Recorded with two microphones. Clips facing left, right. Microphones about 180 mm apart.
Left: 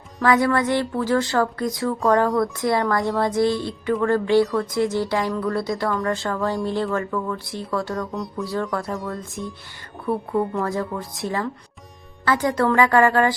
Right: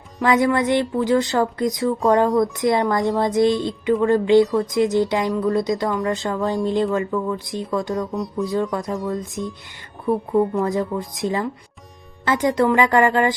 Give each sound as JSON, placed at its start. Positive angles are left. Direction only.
{"t": 0.2, "sound": "speech", "side_deg": -20}
{"t": 8.1, "sound": "music", "side_deg": 0}
{"t": 9.1, "sound": "speech", "side_deg": -20}